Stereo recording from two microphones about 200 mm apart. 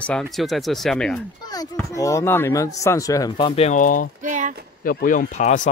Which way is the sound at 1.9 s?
15° left (ahead or behind).